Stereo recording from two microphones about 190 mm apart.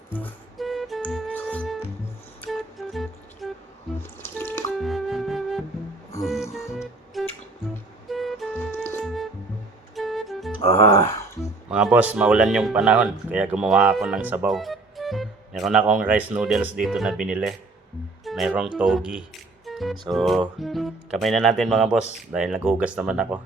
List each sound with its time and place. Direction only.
0.1 s music: 5° left (ahead or behind)
4.0 s music: 10° left (ahead or behind)
4.8 s music: centre (ahead or behind)
6.7 s music: centre (ahead or behind)
10.7 s music: 15° left (ahead or behind)
11.7 s speech: 5° right (ahead or behind)